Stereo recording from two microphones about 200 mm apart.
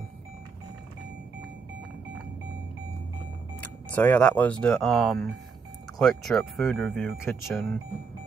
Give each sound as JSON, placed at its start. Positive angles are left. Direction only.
{"t": 3.6, "sound": "speech", "side_deg": 10}